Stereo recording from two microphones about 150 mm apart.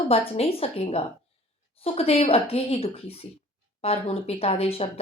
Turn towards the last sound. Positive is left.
turn(degrees=40)  # may be behind; listen again after turning